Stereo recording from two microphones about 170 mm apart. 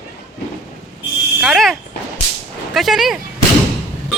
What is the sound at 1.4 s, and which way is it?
Fire alarm, centre (ahead or behind).